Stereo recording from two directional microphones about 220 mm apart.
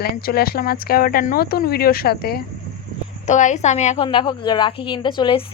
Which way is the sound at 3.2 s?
35° left (ahead or behind).